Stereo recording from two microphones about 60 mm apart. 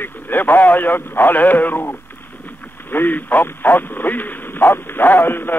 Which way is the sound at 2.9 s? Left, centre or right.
Left.